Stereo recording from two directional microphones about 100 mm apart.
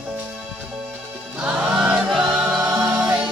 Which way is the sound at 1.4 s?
10° right (ahead or behind).